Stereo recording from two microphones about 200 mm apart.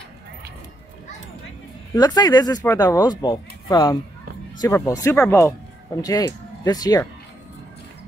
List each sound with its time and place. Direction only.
2.0 s speech: 20° left (ahead or behind)